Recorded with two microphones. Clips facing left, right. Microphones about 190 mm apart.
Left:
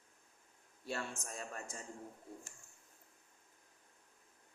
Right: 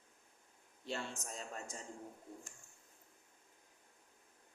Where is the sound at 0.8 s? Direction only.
20° right (ahead or behind).